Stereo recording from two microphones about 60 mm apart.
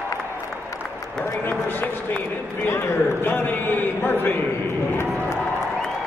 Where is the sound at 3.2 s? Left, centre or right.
Left.